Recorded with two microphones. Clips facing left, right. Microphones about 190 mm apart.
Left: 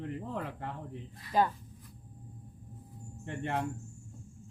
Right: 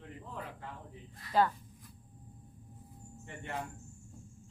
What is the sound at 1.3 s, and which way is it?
Speech, 15° left (ahead or behind).